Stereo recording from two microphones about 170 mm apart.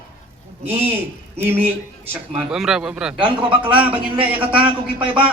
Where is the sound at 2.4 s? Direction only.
5° right (ahead or behind).